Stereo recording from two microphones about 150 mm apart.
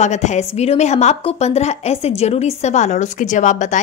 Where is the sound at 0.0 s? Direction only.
50° left (ahead or behind).